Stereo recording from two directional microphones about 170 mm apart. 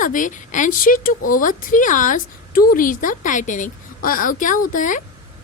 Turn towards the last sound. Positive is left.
turn(degrees=50)  # may be behind; listen again after turning